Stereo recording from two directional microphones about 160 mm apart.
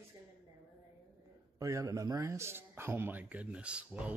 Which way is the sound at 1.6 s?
20° right (ahead or behind).